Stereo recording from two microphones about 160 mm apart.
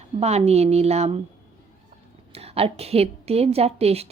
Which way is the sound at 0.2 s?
40° right (ahead or behind).